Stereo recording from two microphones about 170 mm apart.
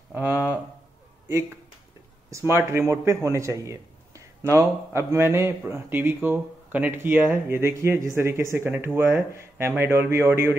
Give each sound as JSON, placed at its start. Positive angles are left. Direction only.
{"t": 0.1, "sound": "a man's voice", "side_deg": -10}
{"t": 2.3, "sound": "a man's voice", "side_deg": -15}